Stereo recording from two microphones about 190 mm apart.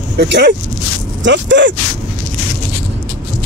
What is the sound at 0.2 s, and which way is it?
Speech, 60° right (ahead or behind).